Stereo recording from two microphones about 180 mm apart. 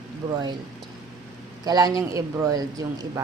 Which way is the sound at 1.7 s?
20° right (ahead or behind).